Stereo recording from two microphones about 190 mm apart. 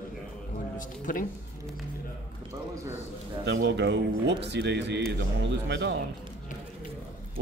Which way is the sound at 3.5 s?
65° right (ahead or behind).